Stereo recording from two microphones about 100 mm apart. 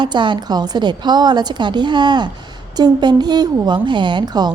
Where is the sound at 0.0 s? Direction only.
50° right (ahead or behind).